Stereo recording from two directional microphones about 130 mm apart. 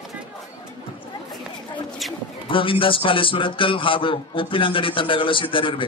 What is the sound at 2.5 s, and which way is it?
A man's voice, 40° left (ahead or behind).